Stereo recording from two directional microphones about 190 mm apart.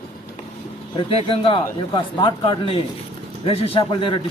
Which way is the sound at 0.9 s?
30° left (ahead or behind).